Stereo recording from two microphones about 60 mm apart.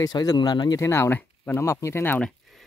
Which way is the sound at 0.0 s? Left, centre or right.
Left.